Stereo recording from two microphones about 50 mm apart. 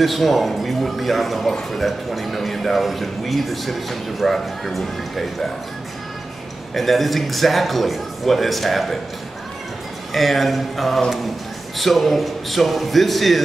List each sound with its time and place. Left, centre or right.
0.0 s a man's voice: centre
6.7 s a man's voice: centre
10.1 s a man's voice: centre